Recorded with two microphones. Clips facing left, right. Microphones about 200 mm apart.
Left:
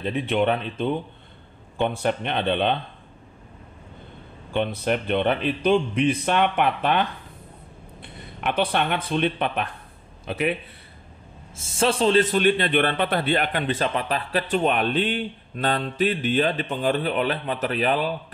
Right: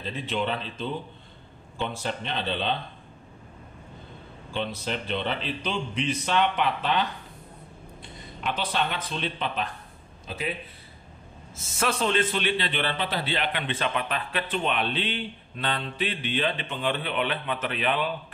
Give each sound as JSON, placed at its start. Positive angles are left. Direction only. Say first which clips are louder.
{"t": 0.0, "sound": "a man's voice", "louder": "left 7 dB", "side_deg": 60}
{"t": 4.5, "sound": "a man's voice", "louder": "left 7 dB", "side_deg": 55}
{"t": 11.5, "sound": "a man's voice", "louder": "left 6 dB", "side_deg": 30}